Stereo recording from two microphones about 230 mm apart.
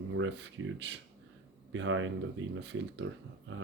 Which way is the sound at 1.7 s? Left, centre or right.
Right.